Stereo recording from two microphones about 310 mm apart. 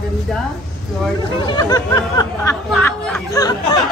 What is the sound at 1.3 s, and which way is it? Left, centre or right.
Speech, centre.